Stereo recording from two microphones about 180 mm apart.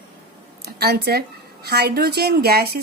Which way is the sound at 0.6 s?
65° right (ahead or behind).